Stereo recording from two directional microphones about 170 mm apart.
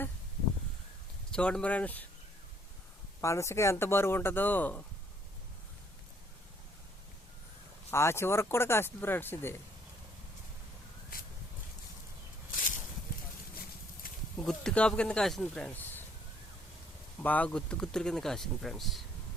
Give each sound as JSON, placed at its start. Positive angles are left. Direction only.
{"t": 1.3, "sound": "speech", "side_deg": 5}
{"t": 3.2, "sound": "speech", "side_deg": 15}
{"t": 7.9, "sound": "speech", "side_deg": 15}
{"t": 14.0, "sound": "a sound", "side_deg": 55}
{"t": 14.4, "sound": "speech", "side_deg": 5}
{"t": 17.2, "sound": "speech", "side_deg": 10}